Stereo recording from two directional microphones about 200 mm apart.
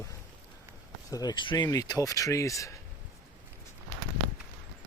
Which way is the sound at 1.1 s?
20° left (ahead or behind).